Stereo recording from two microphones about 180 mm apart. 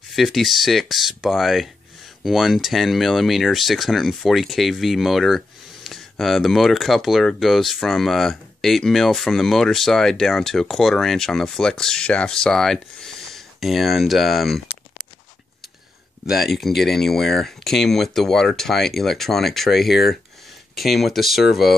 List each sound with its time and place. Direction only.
0.1 s speech: centre (ahead or behind)
16.3 s speech: centre (ahead or behind)